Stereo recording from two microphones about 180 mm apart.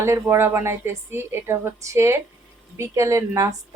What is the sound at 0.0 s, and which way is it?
Speech, 15° right (ahead or behind).